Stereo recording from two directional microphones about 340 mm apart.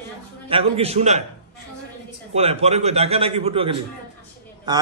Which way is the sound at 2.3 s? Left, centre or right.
Centre.